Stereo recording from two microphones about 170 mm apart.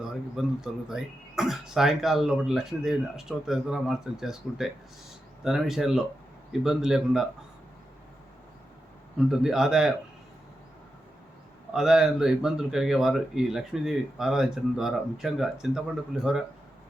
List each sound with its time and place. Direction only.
0.0 s speech: 5° right (ahead or behind)
9.1 s speech: 5° right (ahead or behind)
11.7 s speech: 5° right (ahead or behind)